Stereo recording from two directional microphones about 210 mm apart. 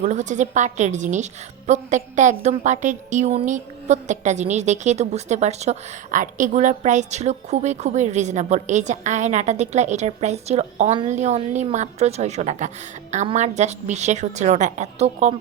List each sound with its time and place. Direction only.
0.0 s a woman's voice: 35° right (ahead or behind)